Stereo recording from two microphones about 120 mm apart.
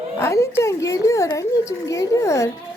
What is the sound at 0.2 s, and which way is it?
Speech, 25° left (ahead or behind).